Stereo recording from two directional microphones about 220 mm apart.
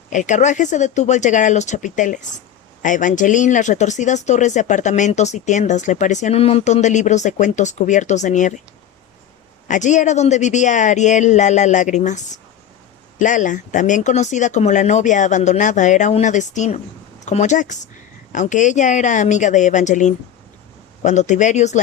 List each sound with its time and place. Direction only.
0.1 s speech: 35° left (ahead or behind)
9.6 s speech: 35° left (ahead or behind)